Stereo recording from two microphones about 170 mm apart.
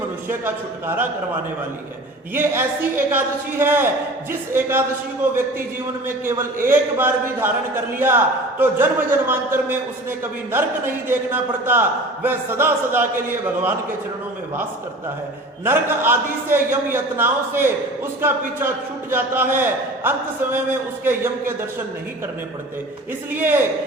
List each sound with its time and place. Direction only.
0.3 s a man's voice: 15° right (ahead or behind)
2.3 s a man's voice: 15° right (ahead or behind)
15.6 s a man's voice: 15° right (ahead or behind)
19.1 s a man's voice: 15° right (ahead or behind)
23.3 s a man's voice: 10° right (ahead or behind)